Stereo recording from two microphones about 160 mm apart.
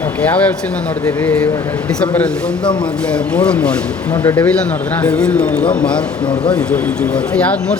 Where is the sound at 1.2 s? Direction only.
10° left (ahead or behind).